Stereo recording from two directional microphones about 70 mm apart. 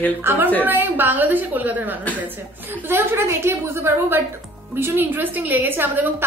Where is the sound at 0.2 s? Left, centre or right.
Right.